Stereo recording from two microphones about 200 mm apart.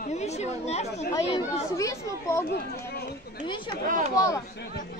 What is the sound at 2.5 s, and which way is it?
Speech, 50° left (ahead or behind).